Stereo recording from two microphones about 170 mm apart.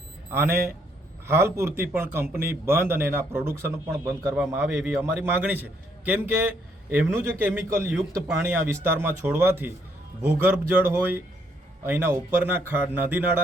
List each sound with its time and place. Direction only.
0.3 s a man's voice: 15° right (ahead or behind)
11.9 s a man's voice: 10° right (ahead or behind)